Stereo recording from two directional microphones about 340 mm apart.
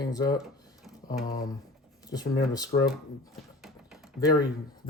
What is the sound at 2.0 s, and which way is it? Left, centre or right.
Speech, centre.